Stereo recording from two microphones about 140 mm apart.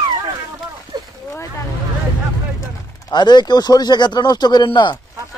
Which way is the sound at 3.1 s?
30° left (ahead or behind).